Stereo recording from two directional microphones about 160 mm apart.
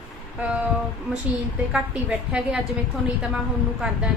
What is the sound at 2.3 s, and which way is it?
Speech, 5° right (ahead or behind).